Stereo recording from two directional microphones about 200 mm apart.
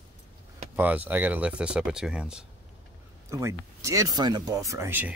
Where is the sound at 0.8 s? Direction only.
10° right (ahead or behind).